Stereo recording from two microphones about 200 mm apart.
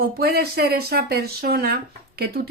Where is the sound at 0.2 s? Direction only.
50° right (ahead or behind).